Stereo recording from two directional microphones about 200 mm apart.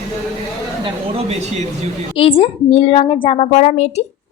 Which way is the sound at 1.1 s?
30° right (ahead or behind).